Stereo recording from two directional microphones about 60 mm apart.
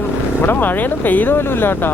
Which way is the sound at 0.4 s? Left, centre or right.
Left.